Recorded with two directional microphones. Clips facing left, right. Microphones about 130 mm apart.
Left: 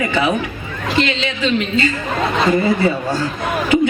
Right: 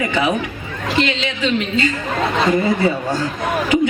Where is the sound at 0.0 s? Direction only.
15° right (ahead or behind).